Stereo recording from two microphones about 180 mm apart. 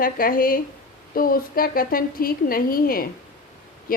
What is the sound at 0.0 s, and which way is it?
A woman's voice, 50° left (ahead or behind).